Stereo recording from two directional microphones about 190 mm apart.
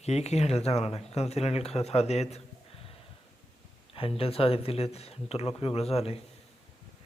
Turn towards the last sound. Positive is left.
turn(degrees=30)  # may be behind; listen again after turning